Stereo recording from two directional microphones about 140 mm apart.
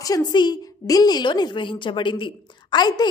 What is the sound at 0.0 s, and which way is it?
A woman's voice, 30° left (ahead or behind).